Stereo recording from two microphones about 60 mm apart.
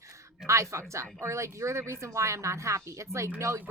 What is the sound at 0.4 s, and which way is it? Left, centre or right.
A woman's voice, right.